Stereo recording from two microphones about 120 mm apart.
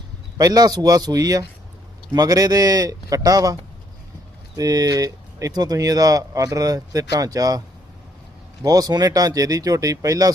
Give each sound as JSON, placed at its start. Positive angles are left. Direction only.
{"t": 0.3, "sound": "speech", "side_deg": -30}
{"t": 8.6, "sound": "speech", "side_deg": -30}